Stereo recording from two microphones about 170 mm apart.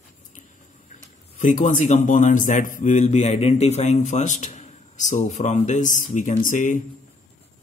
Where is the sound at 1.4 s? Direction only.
50° left (ahead or behind).